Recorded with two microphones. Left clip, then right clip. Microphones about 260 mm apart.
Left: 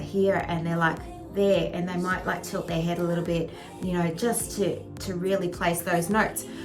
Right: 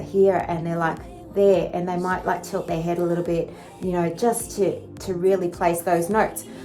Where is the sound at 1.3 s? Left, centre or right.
Right.